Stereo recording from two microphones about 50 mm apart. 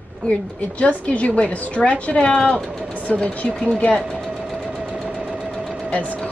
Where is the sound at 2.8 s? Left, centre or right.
Right.